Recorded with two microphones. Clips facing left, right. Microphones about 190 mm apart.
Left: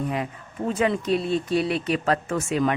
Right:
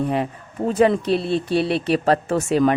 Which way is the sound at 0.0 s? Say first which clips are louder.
Right 5 dB; 30° right (ahead or behind).